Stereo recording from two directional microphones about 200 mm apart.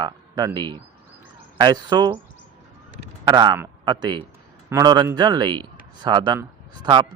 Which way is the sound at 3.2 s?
20° right (ahead or behind).